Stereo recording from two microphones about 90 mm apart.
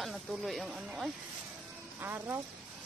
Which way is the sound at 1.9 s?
25° right (ahead or behind).